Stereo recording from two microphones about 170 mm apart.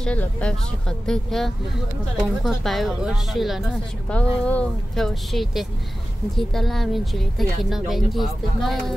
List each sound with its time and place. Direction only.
0.0 s a woman's voice: 5° left (ahead or behind)